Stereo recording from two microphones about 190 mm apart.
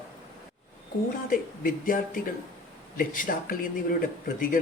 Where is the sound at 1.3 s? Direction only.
45° left (ahead or behind).